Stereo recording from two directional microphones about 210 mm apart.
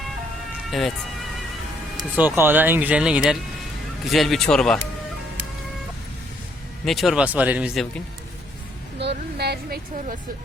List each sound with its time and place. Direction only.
0.7 s speech: centre (ahead or behind)
2.1 s speech: 10° right (ahead or behind)
6.8 s speech: centre (ahead or behind)
9.0 s speech: 50° right (ahead or behind)